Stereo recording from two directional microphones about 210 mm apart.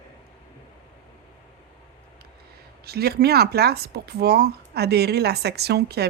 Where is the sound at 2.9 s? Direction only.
50° right (ahead or behind).